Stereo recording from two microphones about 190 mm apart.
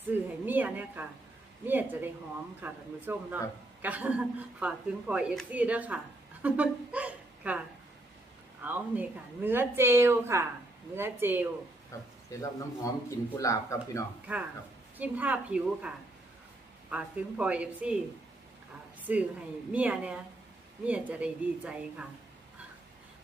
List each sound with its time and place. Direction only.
0.1 s a sound: 10° right (ahead or behind)
0.4 s a woman's voice: 10° right (ahead or behind)
6.4 s a sound: 5° right (ahead or behind)
8.6 s a woman's voice: 10° right (ahead or behind)
11.9 s speech: 15° left (ahead or behind)
14.3 s a woman's voice: 5° right (ahead or behind)
16.9 s a woman's voice: 5° right (ahead or behind)
19.1 s a woman's voice: 10° right (ahead or behind)